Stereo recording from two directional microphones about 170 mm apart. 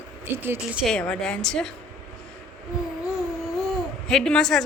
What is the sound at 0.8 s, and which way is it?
Speech, 5° left (ahead or behind).